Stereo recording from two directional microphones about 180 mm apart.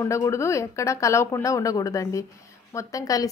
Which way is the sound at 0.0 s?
15° left (ahead or behind).